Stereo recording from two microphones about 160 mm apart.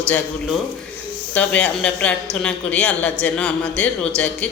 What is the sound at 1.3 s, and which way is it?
Speech, 5° left (ahead or behind).